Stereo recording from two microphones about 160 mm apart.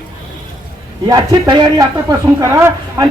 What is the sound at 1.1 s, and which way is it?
A man's voice, 25° right (ahead or behind).